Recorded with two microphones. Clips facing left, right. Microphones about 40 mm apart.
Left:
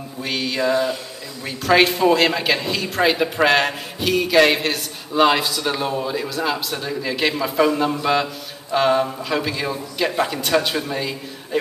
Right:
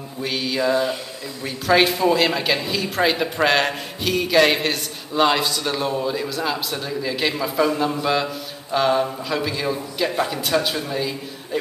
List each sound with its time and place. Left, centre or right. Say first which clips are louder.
0.2 s mantra: even; centre
1.4 s speech: left 1 dB; centre